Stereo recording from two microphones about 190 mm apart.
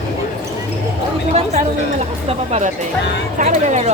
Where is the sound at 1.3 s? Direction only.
35° right (ahead or behind).